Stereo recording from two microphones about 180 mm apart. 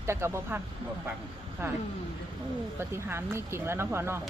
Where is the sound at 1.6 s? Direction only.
15° right (ahead or behind).